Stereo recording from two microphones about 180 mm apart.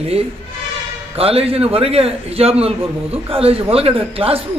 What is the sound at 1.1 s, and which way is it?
A man's voice, 35° right (ahead or behind).